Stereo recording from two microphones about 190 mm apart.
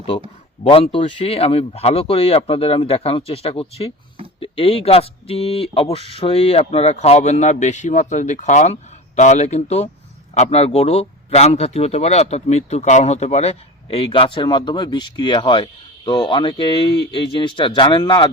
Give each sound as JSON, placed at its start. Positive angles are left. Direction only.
{"t": 0.6, "sound": "speech", "side_deg": 30}